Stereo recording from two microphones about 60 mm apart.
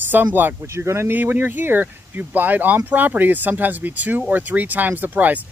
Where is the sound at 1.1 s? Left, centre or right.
Right.